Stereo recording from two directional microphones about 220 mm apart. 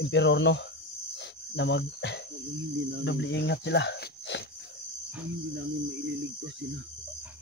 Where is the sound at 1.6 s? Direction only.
55° left (ahead or behind).